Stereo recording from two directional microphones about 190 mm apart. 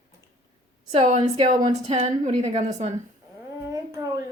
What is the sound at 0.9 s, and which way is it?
Speech, 35° right (ahead or behind).